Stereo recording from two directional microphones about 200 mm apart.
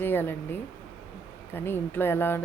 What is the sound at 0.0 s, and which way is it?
Speech, 10° left (ahead or behind).